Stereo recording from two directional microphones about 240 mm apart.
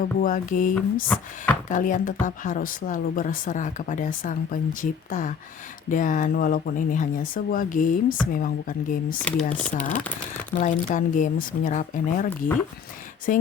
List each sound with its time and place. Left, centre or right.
0.2 s speech: left
1.0 s speech: centre
1.7 s speech: left
9.2 s speech: centre
10.5 s speech: left